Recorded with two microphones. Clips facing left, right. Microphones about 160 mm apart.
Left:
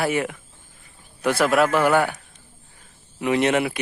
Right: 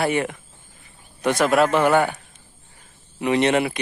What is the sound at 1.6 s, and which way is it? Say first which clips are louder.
Speech: right 1 dB; 20° right (ahead or behind).